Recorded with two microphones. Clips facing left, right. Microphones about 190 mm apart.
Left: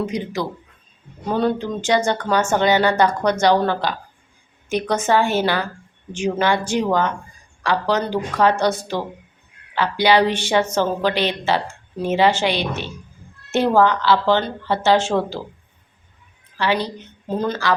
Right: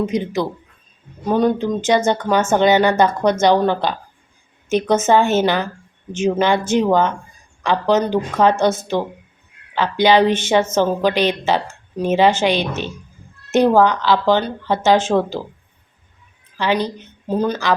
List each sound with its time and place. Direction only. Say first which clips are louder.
0.0 s speech: right 4 dB; 20° right (ahead or behind)
16.6 s speech: right 2 dB; 20° right (ahead or behind)